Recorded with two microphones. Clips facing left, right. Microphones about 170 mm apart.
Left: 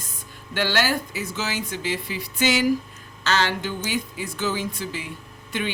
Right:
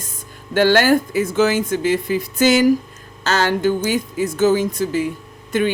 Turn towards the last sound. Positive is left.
turn(degrees=-45)  # may be behind; listen again after turning